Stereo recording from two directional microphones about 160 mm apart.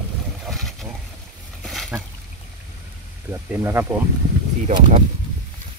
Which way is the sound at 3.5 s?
15° right (ahead or behind).